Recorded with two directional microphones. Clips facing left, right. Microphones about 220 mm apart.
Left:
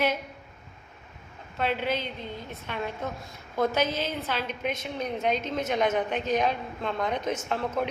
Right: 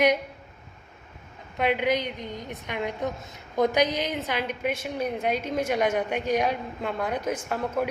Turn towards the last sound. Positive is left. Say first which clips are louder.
# right 1 dB
turn(degrees=-10)  # may be behind; listen again after turning